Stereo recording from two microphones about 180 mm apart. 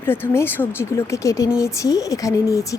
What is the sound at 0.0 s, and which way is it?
A woman's voice, 10° left (ahead or behind).